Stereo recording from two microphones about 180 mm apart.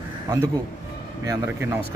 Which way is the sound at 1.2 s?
15° right (ahead or behind).